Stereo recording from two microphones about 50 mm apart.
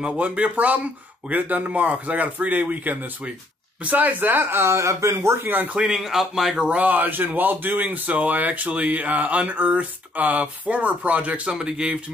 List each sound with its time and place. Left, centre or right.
0.2 s speech: right
5.5 s speech: right
5.9 s a man's voice: centre
6.8 s a man's voice: right; by 11.9 s centre